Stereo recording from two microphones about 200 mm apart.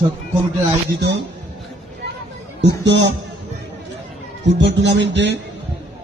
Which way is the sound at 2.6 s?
60° right (ahead or behind).